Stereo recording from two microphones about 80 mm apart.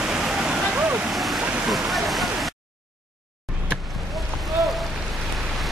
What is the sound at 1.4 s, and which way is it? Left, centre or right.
Waterfall, centre.